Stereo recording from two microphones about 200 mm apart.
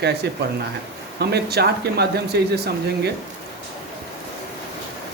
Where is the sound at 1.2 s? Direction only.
55° right (ahead or behind).